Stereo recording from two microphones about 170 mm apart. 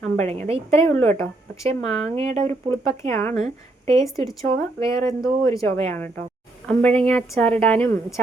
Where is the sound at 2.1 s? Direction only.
40° right (ahead or behind).